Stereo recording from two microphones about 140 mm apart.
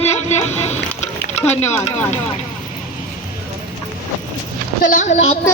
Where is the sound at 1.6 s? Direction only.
15° left (ahead or behind).